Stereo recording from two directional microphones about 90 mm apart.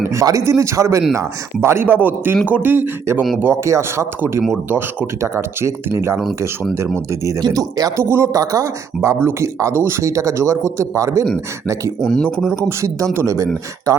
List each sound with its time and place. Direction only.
0.0 s speech: 35° right (ahead or behind)
7.4 s speech: 45° right (ahead or behind)
9.0 s speech: 25° right (ahead or behind)
12.0 s speech: 5° left (ahead or behind)
12.5 s speech: 30° right (ahead or behind)